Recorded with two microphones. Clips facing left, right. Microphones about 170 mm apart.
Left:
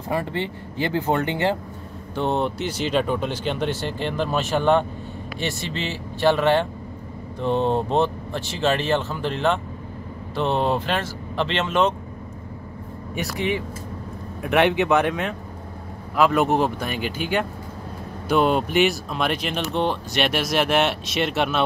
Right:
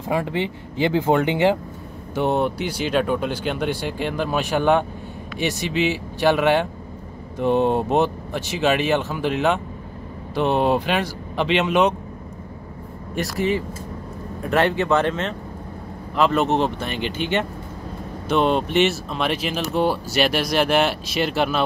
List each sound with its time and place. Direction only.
0.1 s speech: 15° right (ahead or behind)
14.8 s speech: 15° left (ahead or behind)